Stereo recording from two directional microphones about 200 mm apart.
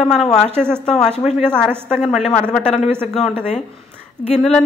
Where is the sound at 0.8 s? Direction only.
Centre (ahead or behind).